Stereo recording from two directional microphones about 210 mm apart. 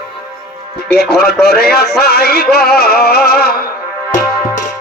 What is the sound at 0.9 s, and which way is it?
Music, 50° left (ahead or behind).